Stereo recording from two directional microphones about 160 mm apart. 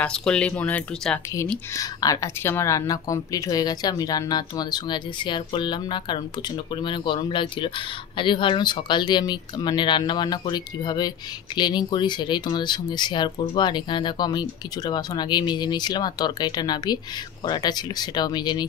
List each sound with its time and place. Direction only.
0.0 s speech: 5° left (ahead or behind)
1.8 s a woman's voice: 20° left (ahead or behind)